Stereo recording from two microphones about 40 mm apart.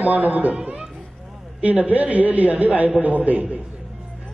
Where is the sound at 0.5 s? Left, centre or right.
Right.